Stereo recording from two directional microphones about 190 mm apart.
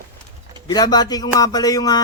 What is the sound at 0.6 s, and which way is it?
A man's voice, 20° left (ahead or behind).